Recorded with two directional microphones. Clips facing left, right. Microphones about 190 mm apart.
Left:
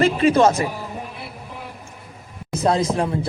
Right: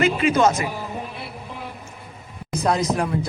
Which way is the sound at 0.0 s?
35° left (ahead or behind).